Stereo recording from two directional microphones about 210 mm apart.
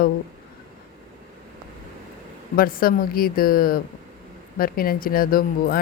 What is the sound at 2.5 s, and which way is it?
Speech, 45° left (ahead or behind).